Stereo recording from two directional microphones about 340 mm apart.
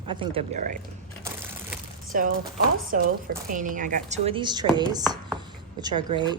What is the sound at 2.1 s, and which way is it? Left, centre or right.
A woman's voice, right.